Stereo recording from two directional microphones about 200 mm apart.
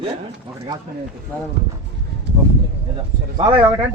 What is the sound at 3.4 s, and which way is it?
Speech, 25° right (ahead or behind).